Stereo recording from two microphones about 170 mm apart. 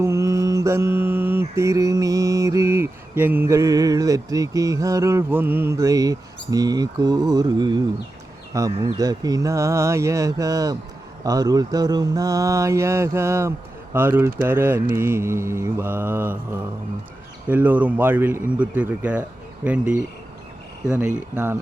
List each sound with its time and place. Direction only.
0.0 s mantra: 15° right (ahead or behind)
13.9 s speech: 10° right (ahead or behind)